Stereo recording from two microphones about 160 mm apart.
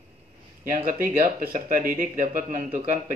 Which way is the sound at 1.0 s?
60° right (ahead or behind).